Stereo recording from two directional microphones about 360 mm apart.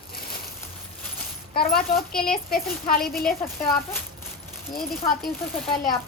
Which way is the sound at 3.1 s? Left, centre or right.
Centre.